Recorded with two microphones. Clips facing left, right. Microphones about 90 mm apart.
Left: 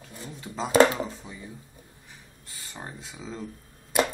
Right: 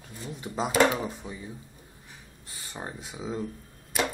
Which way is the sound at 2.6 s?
15° right (ahead or behind).